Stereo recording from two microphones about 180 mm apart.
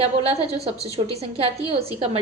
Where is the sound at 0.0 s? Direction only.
35° right (ahead or behind).